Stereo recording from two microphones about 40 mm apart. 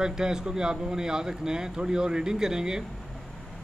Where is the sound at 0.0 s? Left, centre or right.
Centre.